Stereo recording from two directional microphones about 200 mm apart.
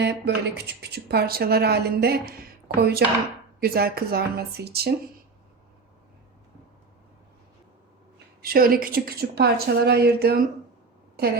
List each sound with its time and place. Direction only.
0.0 s speech: 55° right (ahead or behind)
8.4 s speech: 50° right (ahead or behind)